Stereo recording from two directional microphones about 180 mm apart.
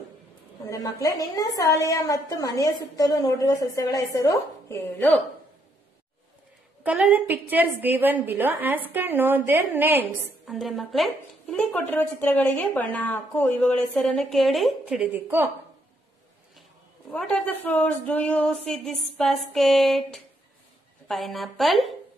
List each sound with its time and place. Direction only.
0.7 s a woman's voice: 20° left (ahead or behind)
6.8 s a woman's voice: 10° right (ahead or behind)
10.5 s speech: centre (ahead or behind)
17.1 s speech: 5° left (ahead or behind)